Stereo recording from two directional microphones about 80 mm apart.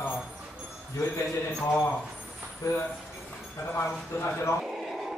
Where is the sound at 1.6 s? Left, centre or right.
Left.